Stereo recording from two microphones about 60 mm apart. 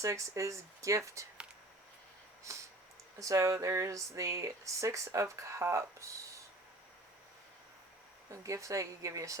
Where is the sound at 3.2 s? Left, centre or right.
Right.